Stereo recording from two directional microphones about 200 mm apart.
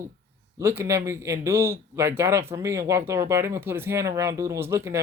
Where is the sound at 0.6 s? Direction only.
15° right (ahead or behind).